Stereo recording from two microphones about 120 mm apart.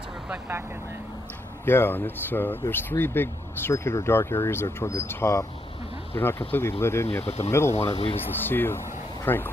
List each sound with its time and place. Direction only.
1.7 s speech: 20° left (ahead or behind)
7.9 s speech: 50° left (ahead or behind)
8.5 s speech: 15° left (ahead or behind)